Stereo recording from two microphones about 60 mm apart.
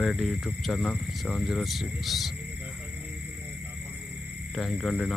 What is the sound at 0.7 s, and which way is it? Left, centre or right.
Speech, left.